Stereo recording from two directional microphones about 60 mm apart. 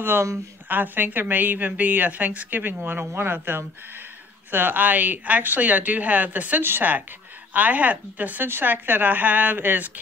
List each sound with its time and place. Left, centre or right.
0.7 s a woman's voice: right